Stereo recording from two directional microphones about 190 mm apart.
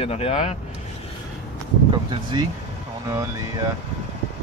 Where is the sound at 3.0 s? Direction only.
20° right (ahead or behind).